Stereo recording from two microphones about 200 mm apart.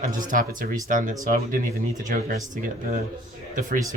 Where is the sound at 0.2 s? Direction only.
40° right (ahead or behind).